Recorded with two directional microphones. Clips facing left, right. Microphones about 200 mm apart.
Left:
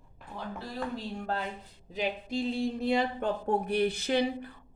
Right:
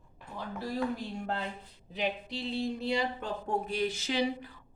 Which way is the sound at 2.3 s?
50° left (ahead or behind).